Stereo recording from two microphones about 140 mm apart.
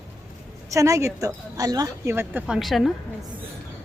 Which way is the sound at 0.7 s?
20° right (ahead or behind).